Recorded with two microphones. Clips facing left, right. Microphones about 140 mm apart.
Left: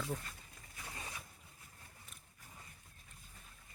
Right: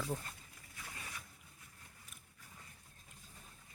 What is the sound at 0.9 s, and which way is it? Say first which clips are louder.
Boat: left 3 dB; 30° left (ahead or behind).